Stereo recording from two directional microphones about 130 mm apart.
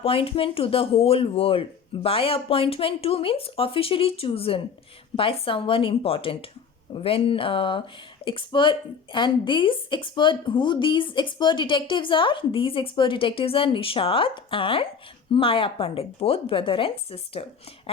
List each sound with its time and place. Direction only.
0.0 s speech: 45° left (ahead or behind)